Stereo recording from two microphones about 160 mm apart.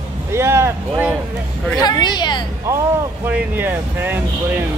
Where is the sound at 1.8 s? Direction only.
25° left (ahead or behind).